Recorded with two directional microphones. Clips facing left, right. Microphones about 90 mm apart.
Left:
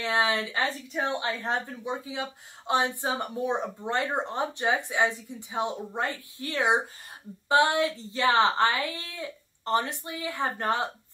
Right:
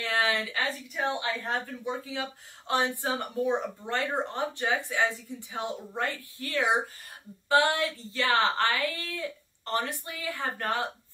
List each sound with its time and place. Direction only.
0.0 s speech: 20° left (ahead or behind)